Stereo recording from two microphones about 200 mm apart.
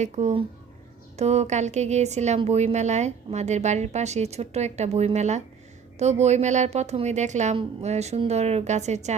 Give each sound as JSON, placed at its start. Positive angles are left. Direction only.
{"t": 0.0, "sound": "a woman's voice", "side_deg": -35}